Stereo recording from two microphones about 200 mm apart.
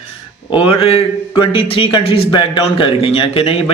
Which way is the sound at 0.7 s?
25° left (ahead or behind).